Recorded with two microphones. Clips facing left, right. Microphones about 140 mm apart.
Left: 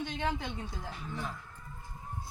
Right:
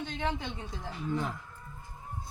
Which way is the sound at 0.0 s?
5° left (ahead or behind).